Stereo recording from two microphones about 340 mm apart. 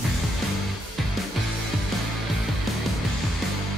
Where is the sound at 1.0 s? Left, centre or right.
Centre.